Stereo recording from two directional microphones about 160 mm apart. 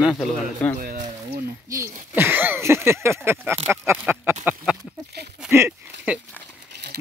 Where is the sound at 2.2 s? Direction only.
10° right (ahead or behind).